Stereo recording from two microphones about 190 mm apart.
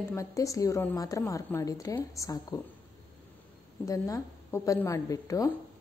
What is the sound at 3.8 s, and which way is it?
A woman's voice, 15° left (ahead or behind).